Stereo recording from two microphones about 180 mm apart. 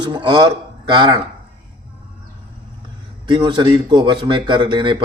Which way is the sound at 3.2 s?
25° right (ahead or behind).